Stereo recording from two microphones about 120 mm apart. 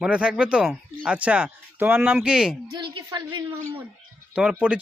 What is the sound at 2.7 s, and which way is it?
Speech, 40° right (ahead or behind).